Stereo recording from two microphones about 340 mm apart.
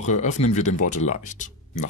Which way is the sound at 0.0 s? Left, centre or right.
Left.